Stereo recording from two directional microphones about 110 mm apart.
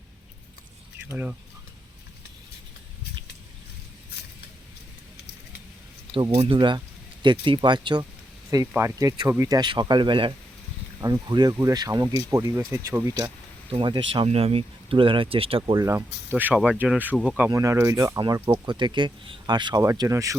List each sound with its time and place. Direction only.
1.0 s speech: 15° right (ahead or behind)
6.3 s speech: 70° right (ahead or behind)
6.6 s speech: 45° right (ahead or behind)
8.8 s speech: 35° right (ahead or behind)
11.0 s speech: 35° right (ahead or behind); by 13.1 s 20° right (ahead or behind)
13.7 s speech: 50° right (ahead or behind)
14.3 s speech: 60° right (ahead or behind)
15.7 s speech: 35° right (ahead or behind)
16.0 s speech: 15° right (ahead or behind)
17.2 s speech: 5° right (ahead or behind)
17.5 s speech: 30° right (ahead or behind)
18.3 s speech: 20° right (ahead or behind)
18.6 s speech: 40° right (ahead or behind)
20.0 s speech: 30° right (ahead or behind)